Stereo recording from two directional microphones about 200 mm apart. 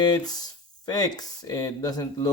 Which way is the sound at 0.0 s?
20° left (ahead or behind).